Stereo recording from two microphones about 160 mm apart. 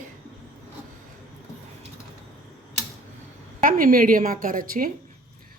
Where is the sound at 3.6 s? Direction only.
60° right (ahead or behind).